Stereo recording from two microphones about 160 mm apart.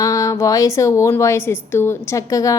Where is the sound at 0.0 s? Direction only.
20° left (ahead or behind).